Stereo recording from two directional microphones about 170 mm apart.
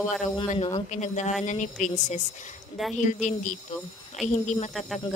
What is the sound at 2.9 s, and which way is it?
A woman's voice, 45° left (ahead or behind).